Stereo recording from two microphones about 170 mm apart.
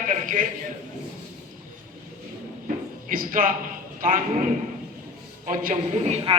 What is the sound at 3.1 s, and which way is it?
A man's voice, 55° right (ahead or behind).